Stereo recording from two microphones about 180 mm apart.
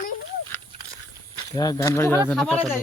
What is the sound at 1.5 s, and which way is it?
Speech, 20° left (ahead or behind).